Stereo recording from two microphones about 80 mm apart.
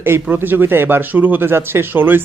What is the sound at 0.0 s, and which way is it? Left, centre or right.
Speech, right.